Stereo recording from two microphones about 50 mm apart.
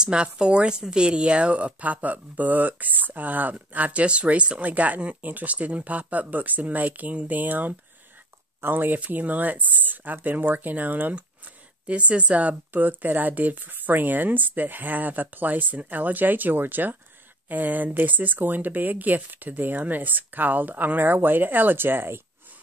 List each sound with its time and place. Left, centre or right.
0.0 s a woman's voice: centre; by 11.1 s right
11.8 s speech: right
12.7 s a woman's voice: right